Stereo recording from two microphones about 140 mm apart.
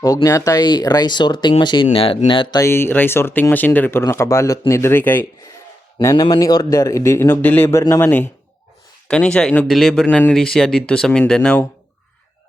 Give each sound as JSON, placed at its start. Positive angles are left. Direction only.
{"t": 0.0, "sound": "speech", "side_deg": 25}
{"t": 2.6, "sound": "speech", "side_deg": 20}
{"t": 6.1, "sound": "speech", "side_deg": 35}
{"t": 6.4, "sound": "speech", "side_deg": 25}